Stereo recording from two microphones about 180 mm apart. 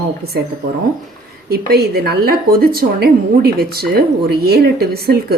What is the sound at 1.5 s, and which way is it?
Speech, 60° right (ahead or behind).